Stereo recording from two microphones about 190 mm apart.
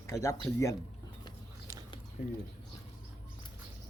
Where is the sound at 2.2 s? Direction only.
55° left (ahead or behind).